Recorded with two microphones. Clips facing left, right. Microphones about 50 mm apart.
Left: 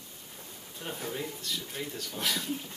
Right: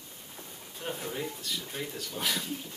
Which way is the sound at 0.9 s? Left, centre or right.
Centre.